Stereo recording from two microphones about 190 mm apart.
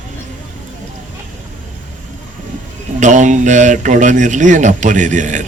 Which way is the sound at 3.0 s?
40° right (ahead or behind).